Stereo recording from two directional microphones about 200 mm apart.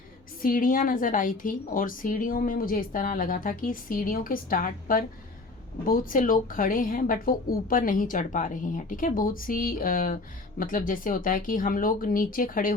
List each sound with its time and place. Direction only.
0.4 s a woman's voice: 45° left (ahead or behind)